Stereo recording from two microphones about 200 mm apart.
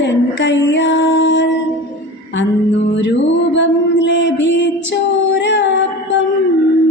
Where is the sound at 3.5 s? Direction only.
65° left (ahead or behind).